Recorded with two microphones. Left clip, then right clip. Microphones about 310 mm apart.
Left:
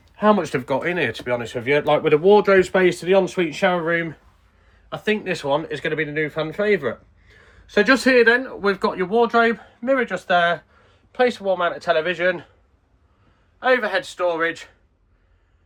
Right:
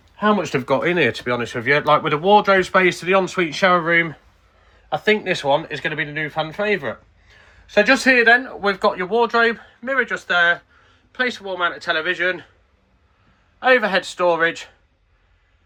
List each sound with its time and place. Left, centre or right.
0.2 s speech: centre
1.6 s speech: right
2.4 s speech: centre
13.6 s speech: centre